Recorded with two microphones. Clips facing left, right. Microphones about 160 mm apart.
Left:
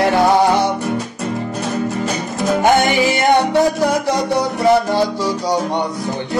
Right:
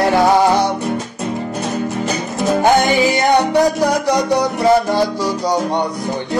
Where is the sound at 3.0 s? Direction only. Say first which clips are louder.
Even; 15° right (ahead or behind).